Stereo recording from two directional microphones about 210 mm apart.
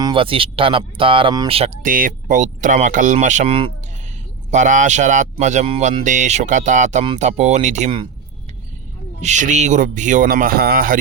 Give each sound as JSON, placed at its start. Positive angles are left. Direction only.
{"t": 0.0, "sound": "speech", "side_deg": -25}
{"t": 9.2, "sound": "speech", "side_deg": -35}